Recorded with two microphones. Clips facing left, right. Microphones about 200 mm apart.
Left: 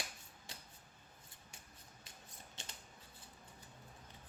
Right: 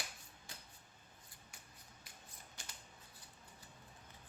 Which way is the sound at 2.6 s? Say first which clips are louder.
Left 3 dB; 25° left (ahead or behind).